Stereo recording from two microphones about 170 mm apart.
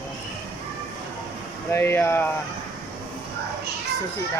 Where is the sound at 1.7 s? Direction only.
15° left (ahead or behind).